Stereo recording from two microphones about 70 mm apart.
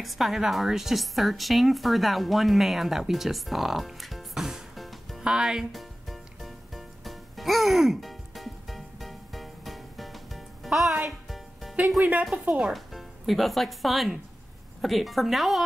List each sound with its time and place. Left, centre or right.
0.0 s a woman's voice: centre
5.7 s music: centre
12.0 s speech: centre
12.3 s a woman's voice: centre